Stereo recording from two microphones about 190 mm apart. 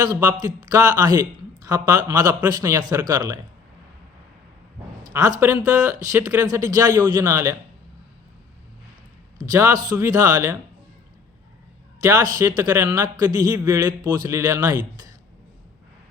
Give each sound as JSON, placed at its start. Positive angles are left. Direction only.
{"t": 0.0, "sound": "a man's voice", "side_deg": -20}
{"t": 5.0, "sound": "a sound", "side_deg": -20}
{"t": 5.4, "sound": "speech", "side_deg": -10}
{"t": 9.4, "sound": "speech", "side_deg": -15}
{"t": 11.9, "sound": "speech", "side_deg": -20}